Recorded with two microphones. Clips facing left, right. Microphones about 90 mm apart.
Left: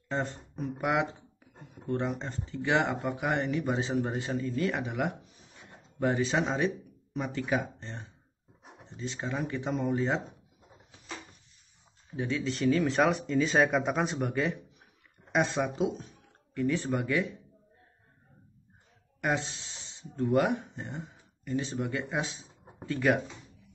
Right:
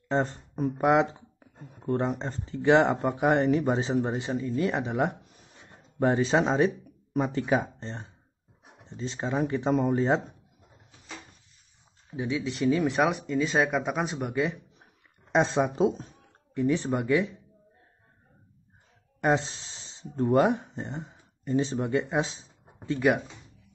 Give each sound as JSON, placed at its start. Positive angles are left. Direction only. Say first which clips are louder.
{"t": 0.1, "sound": "speech", "louder": "right 6 dB", "side_deg": -35}
{"t": 12.2, "sound": "speech", "louder": "right 2 dB", "side_deg": -15}
{"t": 15.3, "sound": "speech", "louder": "right 4 dB", "side_deg": -25}
{"t": 19.2, "sound": "speech", "louder": "right 5 dB", "side_deg": -30}
{"t": 22.8, "sound": "speech", "louder": "right 2 dB", "side_deg": -15}